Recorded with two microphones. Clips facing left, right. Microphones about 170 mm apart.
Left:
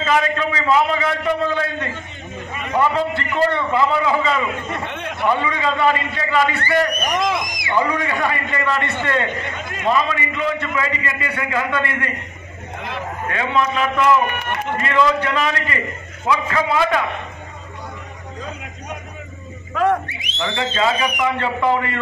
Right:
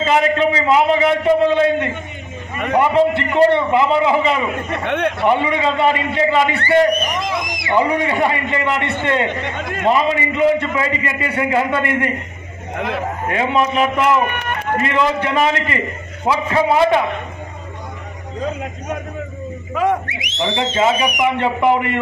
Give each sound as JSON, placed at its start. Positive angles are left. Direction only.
{"t": 0.0, "sound": "a man's voice", "side_deg": -25}
{"t": 4.8, "sound": "a man's voice", "side_deg": -70}
{"t": 5.2, "sound": "a man's voice", "side_deg": -25}
{"t": 12.7, "sound": "speech", "side_deg": -60}
{"t": 13.3, "sound": "a man's voice", "side_deg": -25}
{"t": 19.7, "sound": "speech", "side_deg": -10}
{"t": 20.1, "sound": "a sound", "side_deg": -90}
{"t": 20.3, "sound": "a man's voice", "side_deg": -20}